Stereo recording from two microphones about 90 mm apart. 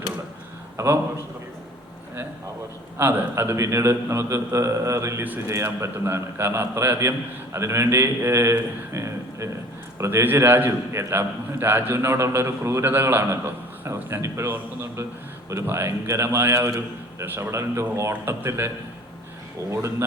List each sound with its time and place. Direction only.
0.8 s a man's voice: 35° right (ahead or behind)
3.0 s a man's voice: 25° right (ahead or behind)
8.9 s a sound: 35° right (ahead or behind)
10.0 s a man's voice: 30° right (ahead or behind)
19.7 s a man's voice: 30° right (ahead or behind)